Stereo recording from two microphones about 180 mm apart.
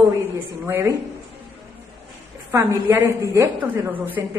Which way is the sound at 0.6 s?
15° right (ahead or behind).